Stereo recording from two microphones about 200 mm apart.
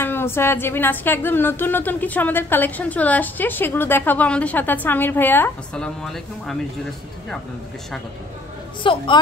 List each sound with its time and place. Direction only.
0.0 s a woman's voice: 10° left (ahead or behind)
8.8 s a woman's voice: 25° left (ahead or behind)